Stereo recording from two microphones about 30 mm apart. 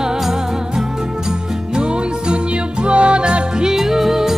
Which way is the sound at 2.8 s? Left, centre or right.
Right.